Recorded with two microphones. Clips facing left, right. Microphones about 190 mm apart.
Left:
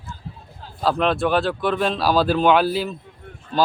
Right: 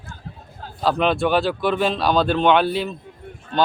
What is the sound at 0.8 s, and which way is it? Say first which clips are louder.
Speech: right 1 dB; centre (ahead or behind).